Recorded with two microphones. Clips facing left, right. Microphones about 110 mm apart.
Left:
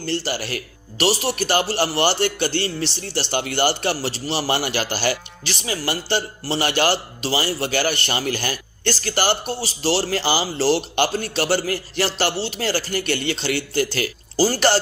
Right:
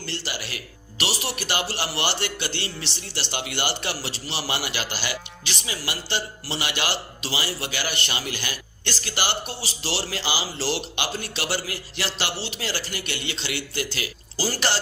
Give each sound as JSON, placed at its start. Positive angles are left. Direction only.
{"t": 0.0, "sound": "speech", "side_deg": 40}